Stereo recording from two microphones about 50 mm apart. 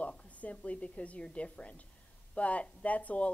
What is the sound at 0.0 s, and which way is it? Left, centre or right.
Speech, left.